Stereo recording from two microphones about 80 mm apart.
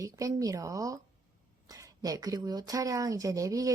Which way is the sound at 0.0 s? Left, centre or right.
Right.